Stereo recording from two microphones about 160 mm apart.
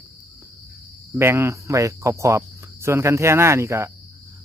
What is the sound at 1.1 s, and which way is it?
Speech, 15° right (ahead or behind).